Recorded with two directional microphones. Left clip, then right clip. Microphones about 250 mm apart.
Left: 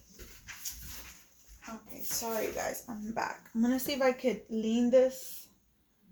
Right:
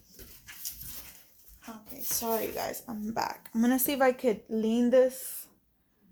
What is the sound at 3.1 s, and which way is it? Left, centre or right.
Speech, right.